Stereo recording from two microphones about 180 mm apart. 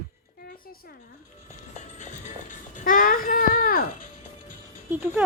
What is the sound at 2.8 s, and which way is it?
A child's voice, 50° left (ahead or behind).